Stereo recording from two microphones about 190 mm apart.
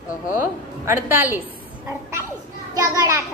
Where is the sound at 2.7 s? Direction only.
20° right (ahead or behind).